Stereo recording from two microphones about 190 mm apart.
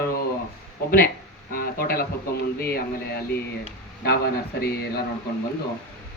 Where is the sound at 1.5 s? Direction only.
50° left (ahead or behind).